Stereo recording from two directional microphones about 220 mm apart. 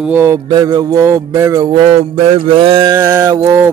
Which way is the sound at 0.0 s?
10° right (ahead or behind).